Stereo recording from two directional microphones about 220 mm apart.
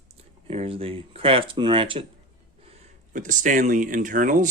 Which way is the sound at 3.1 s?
35° right (ahead or behind).